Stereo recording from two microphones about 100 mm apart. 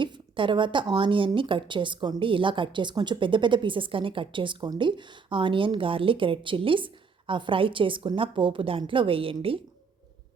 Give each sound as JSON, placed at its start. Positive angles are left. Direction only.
{"t": 0.0, "sound": "speech", "side_deg": -55}